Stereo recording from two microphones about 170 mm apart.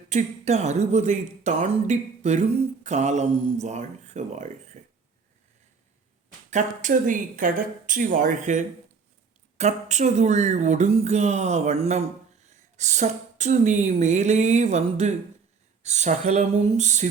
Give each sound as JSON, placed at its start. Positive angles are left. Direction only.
{"t": 0.1, "sound": "speech", "side_deg": -45}
{"t": 4.8, "sound": "a sound", "side_deg": -50}
{"t": 6.5, "sound": "speech", "side_deg": -45}